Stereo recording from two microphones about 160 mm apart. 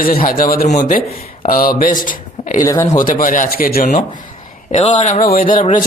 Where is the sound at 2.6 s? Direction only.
20° left (ahead or behind).